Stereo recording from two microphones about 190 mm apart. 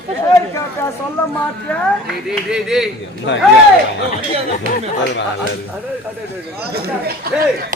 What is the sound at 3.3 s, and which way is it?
Speech, 65° left (ahead or behind).